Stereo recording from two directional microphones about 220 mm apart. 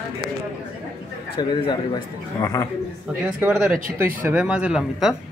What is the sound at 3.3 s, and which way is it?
Speech, 5° right (ahead or behind).